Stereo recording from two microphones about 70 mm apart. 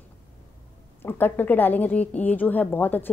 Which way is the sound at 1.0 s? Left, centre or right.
Left.